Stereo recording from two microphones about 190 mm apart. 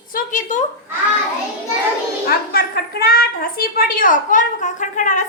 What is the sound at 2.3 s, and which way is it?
A woman's voice, 55° left (ahead or behind).